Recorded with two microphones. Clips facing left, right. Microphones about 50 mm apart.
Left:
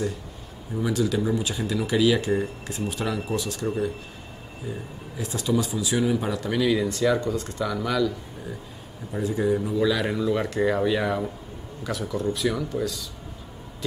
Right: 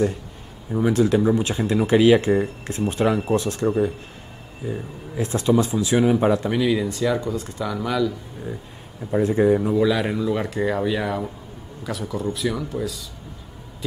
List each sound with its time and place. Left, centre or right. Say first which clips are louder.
0.7 s speech: right 6 dB; right
3.6 s speech: right 5 dB; right
5.1 s speech: right 6 dB; right
6.5 s speech: right 2 dB; centre
9.1 s speech: right 6 dB; right
9.8 s speech: right 3 dB; centre